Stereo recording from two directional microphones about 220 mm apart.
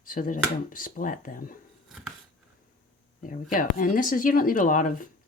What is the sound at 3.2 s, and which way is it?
Speech, 40° left (ahead or behind).